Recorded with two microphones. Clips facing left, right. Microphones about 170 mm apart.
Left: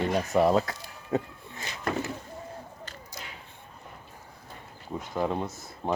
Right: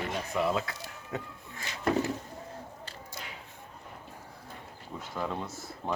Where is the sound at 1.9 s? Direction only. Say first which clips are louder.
Right 3 dB; 25° right (ahead or behind).